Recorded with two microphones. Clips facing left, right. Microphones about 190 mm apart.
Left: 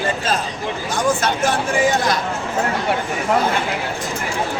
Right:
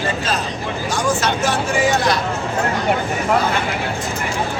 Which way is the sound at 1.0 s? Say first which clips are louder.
Left 1 dB; 55° left (ahead or behind).